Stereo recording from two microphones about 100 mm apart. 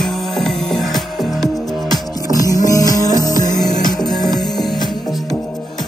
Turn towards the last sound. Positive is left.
turn(degrees=0)  # may be behind; listen again after turning